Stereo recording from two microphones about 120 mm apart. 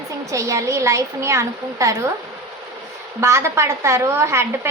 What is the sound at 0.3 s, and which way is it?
Speech, 25° right (ahead or behind).